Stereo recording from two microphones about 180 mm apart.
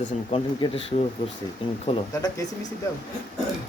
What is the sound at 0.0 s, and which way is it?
Speech, 35° left (ahead or behind).